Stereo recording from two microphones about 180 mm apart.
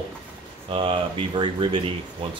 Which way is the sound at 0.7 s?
30° right (ahead or behind).